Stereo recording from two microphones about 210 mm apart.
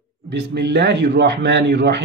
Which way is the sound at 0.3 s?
55° right (ahead or behind).